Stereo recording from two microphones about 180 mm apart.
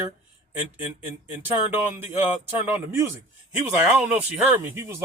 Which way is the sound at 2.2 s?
10° right (ahead or behind).